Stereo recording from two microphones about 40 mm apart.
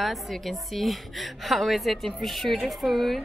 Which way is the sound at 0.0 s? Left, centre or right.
Centre.